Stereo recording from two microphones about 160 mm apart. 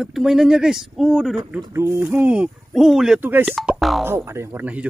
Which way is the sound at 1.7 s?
15° right (ahead or behind).